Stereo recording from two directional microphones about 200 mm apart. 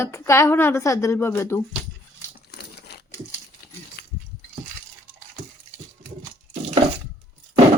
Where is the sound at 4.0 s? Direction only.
55° left (ahead or behind).